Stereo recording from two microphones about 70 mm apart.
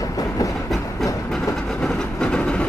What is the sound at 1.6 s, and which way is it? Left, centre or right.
Train, centre.